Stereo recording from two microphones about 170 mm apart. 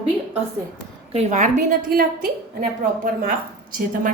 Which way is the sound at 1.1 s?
45° right (ahead or behind).